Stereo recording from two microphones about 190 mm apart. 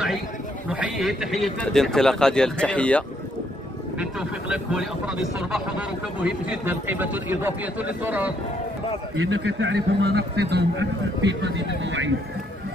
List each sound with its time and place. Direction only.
0.7 s a man's voice: 5° right (ahead or behind)
4.0 s speech: 5° right (ahead or behind)
9.1 s a man's voice: 85° right